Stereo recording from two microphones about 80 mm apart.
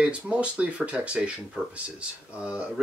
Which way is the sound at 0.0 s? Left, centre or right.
Centre.